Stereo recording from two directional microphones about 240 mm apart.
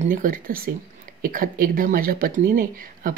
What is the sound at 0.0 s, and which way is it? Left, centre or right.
Speech, right.